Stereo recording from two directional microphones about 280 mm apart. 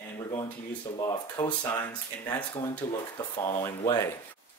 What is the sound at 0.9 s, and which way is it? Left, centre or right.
Speech, centre.